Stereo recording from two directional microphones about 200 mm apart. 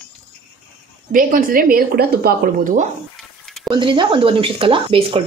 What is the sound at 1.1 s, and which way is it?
A woman's voice, 45° right (ahead or behind).